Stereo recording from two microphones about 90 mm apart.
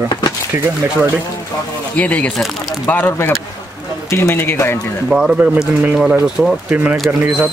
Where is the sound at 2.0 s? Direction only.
15° left (ahead or behind).